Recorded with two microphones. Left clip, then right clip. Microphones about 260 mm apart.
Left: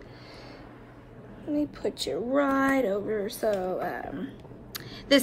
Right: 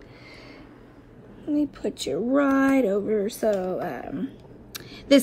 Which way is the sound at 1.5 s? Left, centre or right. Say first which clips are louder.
Right 3 dB; right.